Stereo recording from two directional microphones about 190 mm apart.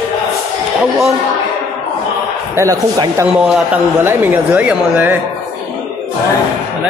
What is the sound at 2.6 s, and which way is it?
Speech, 15° right (ahead or behind).